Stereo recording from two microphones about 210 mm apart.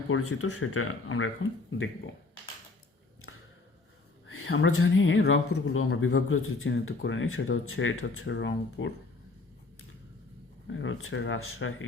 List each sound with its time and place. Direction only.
0.1 s speech: 90° left; by 1.9 s 70° left (ahead or behind)
4.3 s a woman's voice: 85° left; by 5.2 s 70° left (ahead or behind)
5.5 s speech: 90° left; by 8.9 s 65° left (ahead or behind)
10.7 s speech: 65° left (ahead or behind)